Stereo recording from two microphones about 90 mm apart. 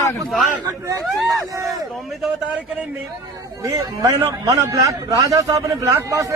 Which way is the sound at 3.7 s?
35° right (ahead or behind).